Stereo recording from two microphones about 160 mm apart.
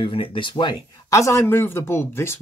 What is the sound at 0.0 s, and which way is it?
Speech, 35° left (ahead or behind).